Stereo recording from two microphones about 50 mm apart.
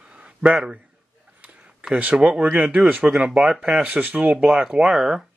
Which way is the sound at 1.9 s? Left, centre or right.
Right.